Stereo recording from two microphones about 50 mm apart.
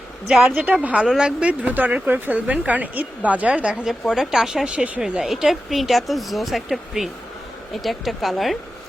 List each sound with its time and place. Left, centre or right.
0.3 s speech: centre
0.6 s speech: right
1.0 s speech: centre
1.4 s a woman's voice: right
3.8 s speech: centre
4.6 s speech: centre
5.2 s speech: centre